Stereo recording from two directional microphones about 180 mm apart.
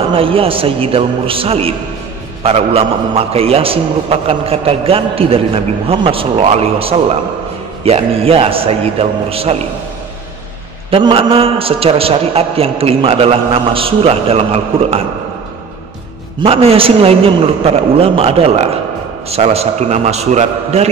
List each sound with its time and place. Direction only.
0.1 s a man's voice: 30° right (ahead or behind)
10.9 s a man's voice: 30° right (ahead or behind)
16.3 s a man's voice: 30° right (ahead or behind)